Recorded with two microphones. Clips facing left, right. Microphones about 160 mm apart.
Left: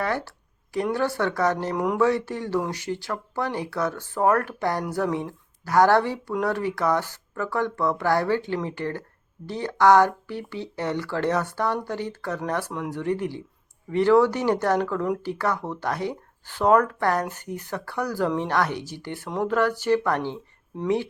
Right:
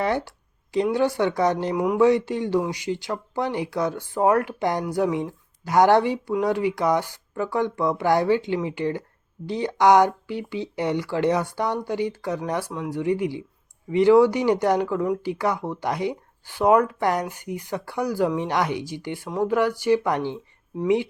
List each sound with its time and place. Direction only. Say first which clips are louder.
0.0 s a sound: right 3 dB; 20° right (ahead or behind)
0.9 s speech: right 2 dB; 15° right (ahead or behind)
2.0 s speech: right 4 dB; 20° right (ahead or behind)